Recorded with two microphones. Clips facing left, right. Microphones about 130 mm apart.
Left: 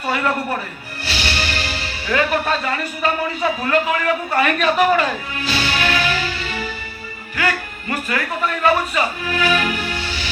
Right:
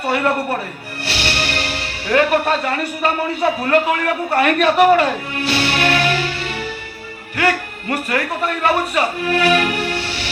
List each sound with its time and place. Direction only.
1.0 s music: 60° right (ahead or behind)
3.7 s speech: 60° right (ahead or behind)